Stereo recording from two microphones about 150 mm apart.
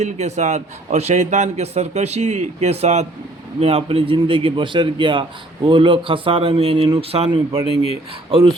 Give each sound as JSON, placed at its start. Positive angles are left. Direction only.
{"t": 0.0, "sound": "a man's voice", "side_deg": -50}